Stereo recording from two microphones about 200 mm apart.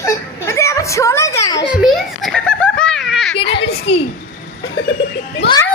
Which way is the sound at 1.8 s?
Centre (ahead or behind).